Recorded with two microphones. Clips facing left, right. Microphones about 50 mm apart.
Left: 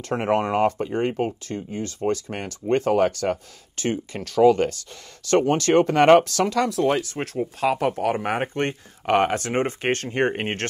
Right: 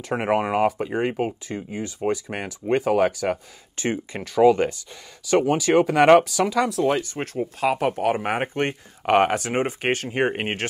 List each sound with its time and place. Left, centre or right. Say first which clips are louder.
0.0 s speech: even; centre
3.7 s speech: even; right
5.3 s speech: even; centre